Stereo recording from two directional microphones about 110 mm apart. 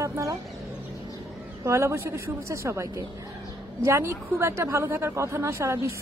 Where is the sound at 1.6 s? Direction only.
25° right (ahead or behind).